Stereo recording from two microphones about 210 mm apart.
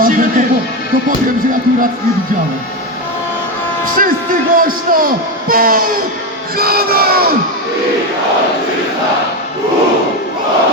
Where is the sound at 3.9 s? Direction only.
40° right (ahead or behind).